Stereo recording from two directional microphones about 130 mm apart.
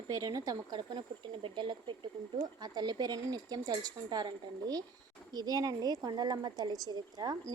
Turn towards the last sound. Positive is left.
turn(degrees=-30)  # may be behind; listen again after turning